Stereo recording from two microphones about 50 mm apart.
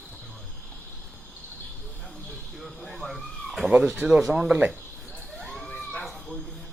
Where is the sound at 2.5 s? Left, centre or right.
Centre.